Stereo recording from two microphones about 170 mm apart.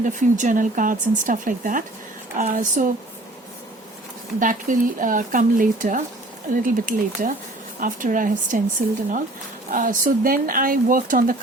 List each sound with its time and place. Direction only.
0.0 s speech: 50° right (ahead or behind)
4.4 s speech: 55° right (ahead or behind)
9.7 s speech: 50° right (ahead or behind)